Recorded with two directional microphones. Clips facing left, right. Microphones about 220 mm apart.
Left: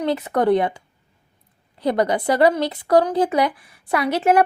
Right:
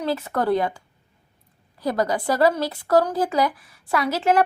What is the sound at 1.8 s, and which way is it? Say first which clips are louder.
A woman's voice: left 3 dB; 20° left (ahead or behind).